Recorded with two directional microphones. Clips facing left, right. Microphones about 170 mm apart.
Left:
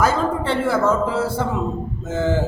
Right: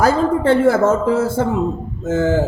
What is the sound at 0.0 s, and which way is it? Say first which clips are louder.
Speech: right 5 dB; 35° right (ahead or behind).